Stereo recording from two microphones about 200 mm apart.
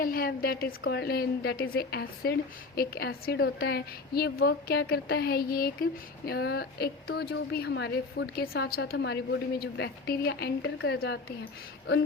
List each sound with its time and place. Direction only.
0.0 s a woman's voice: 45° left (ahead or behind)